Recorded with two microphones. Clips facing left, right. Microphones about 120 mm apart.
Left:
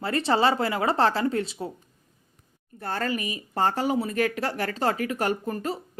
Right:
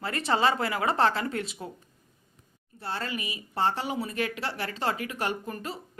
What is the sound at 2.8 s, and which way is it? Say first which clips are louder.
Speech: left 5 dB; 50° left (ahead or behind).